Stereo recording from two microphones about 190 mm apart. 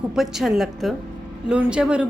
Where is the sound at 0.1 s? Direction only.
Centre (ahead or behind).